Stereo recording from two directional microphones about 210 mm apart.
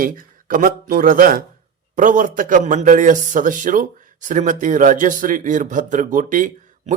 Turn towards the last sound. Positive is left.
turn(degrees=-40)  # may be behind; listen again after turning